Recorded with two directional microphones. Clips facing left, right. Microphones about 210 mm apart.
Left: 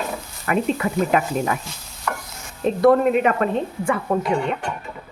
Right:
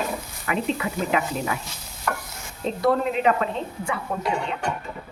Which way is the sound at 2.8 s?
50° left (ahead or behind).